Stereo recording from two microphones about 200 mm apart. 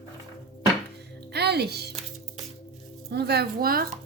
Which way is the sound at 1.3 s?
55° right (ahead or behind).